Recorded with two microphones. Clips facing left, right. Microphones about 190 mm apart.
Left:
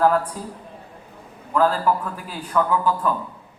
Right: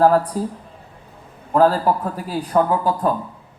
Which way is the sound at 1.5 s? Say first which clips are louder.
Right 4 dB; 40° right (ahead or behind).